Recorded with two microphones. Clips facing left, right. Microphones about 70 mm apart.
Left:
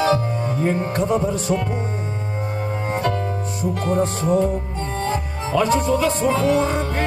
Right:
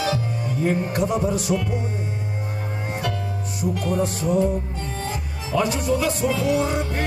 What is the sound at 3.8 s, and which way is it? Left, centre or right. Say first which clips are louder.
Music: left 4 dB; left.